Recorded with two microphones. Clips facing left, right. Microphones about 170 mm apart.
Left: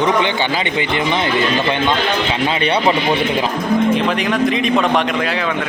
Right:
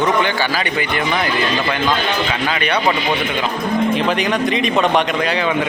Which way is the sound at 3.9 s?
Centre (ahead or behind).